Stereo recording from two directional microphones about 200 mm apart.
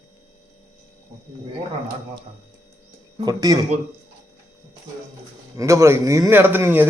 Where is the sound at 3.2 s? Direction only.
20° right (ahead or behind).